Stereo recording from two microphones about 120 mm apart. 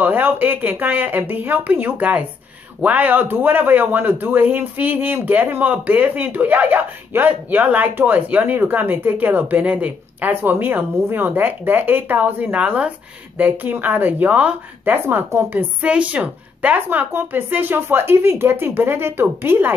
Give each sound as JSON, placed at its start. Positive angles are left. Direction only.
{"t": 0.0, "sound": "a man's voice", "side_deg": -15}